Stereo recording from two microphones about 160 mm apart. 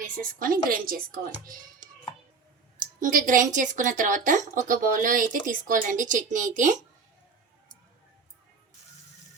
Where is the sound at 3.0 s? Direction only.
55° right (ahead or behind).